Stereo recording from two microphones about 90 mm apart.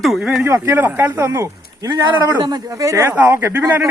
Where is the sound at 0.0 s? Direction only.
Centre (ahead or behind).